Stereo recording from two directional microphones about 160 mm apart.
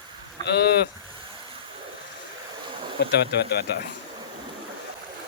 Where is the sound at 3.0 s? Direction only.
90° left.